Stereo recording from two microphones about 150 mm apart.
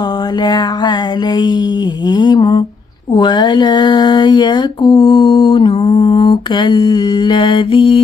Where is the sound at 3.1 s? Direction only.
30° left (ahead or behind).